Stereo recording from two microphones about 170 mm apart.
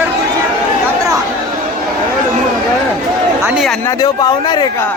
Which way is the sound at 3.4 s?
Centre (ahead or behind).